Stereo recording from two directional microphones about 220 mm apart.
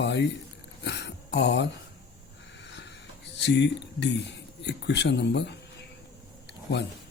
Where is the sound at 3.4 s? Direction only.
50° left (ahead or behind).